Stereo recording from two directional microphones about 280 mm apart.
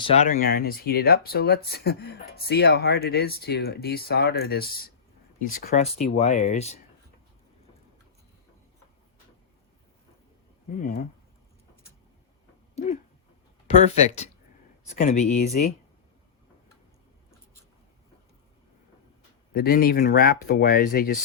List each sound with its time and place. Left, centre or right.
0.0 s speech: left
10.8 s speech: left
13.7 s speech: left
19.5 s speech: left